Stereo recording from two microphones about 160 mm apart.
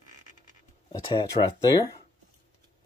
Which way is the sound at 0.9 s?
20° left (ahead or behind).